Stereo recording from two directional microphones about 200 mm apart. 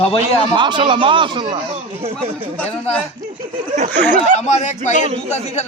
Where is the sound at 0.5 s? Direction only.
25° right (ahead or behind).